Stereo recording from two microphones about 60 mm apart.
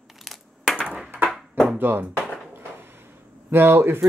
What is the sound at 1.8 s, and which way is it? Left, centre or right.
Speech, right.